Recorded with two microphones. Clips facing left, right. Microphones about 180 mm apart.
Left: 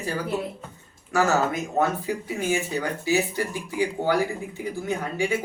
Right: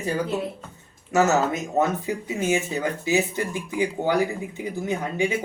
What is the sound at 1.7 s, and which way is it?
Speech, 20° right (ahead or behind).